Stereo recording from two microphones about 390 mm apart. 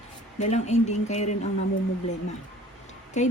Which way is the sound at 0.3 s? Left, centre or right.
Centre.